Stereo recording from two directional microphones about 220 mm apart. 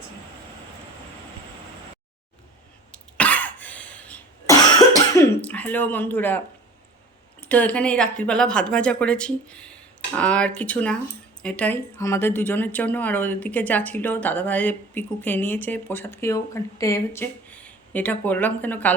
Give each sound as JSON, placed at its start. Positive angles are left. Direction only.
{"t": 2.9, "sound": "cough", "side_deg": 5}
{"t": 4.7, "sound": "cough", "side_deg": 15}
{"t": 5.4, "sound": "speech", "side_deg": 5}
{"t": 7.4, "sound": "speech", "side_deg": 5}